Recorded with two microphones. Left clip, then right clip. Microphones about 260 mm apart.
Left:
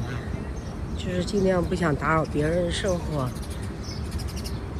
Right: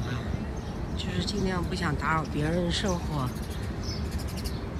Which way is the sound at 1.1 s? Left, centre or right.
Centre.